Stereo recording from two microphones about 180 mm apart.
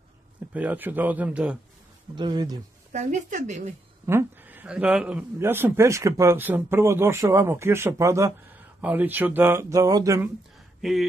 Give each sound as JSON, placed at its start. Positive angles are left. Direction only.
{"t": 0.5, "sound": "a man's voice", "side_deg": -10}
{"t": 2.1, "sound": "speech", "side_deg": -25}
{"t": 2.9, "sound": "speech", "side_deg": -40}
{"t": 4.0, "sound": "a man's voice", "side_deg": -15}
{"t": 10.8, "sound": "speech", "side_deg": 0}